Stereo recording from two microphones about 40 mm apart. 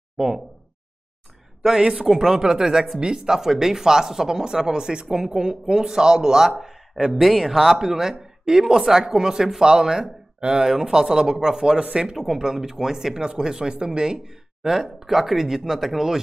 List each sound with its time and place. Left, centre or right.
1.8 s speech: centre
7.2 s speech: centre